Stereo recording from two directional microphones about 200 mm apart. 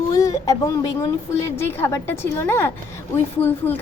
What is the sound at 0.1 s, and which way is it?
A woman's voice, 15° left (ahead or behind).